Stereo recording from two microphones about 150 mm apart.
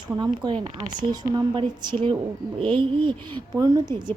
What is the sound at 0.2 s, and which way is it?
A woman's voice, 30° right (ahead or behind).